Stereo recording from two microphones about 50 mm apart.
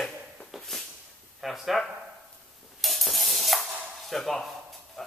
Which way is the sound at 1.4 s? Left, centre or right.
Centre.